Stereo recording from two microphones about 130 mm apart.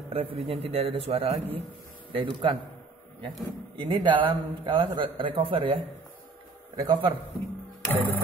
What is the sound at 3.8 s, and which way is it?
A man's voice, 40° right (ahead or behind).